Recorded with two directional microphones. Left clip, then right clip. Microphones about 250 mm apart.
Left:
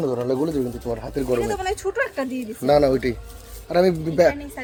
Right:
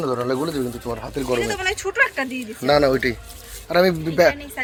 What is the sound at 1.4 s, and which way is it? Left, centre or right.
Speech, left.